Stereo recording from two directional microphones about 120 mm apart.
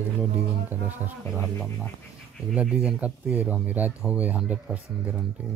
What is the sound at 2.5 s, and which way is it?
Speech, 5° right (ahead or behind).